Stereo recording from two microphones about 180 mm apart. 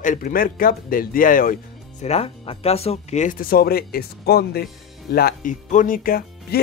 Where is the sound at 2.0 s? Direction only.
35° left (ahead or behind).